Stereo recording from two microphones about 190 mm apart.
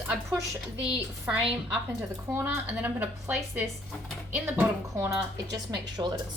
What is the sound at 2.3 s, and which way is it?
A woman's voice, 10° right (ahead or behind).